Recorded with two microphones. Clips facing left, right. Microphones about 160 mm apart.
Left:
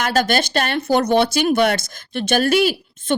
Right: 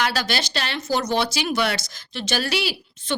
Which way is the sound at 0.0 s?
50° left (ahead or behind).